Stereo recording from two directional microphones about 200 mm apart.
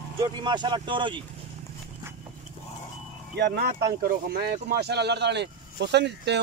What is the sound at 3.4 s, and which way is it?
Speech, 55° right (ahead or behind).